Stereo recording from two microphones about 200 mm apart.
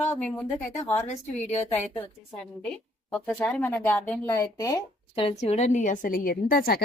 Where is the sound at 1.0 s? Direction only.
35° left (ahead or behind).